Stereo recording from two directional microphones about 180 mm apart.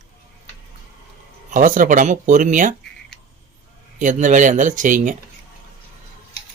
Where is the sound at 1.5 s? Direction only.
45° right (ahead or behind).